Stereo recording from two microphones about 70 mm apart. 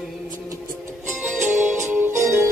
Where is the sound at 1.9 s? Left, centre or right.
Right.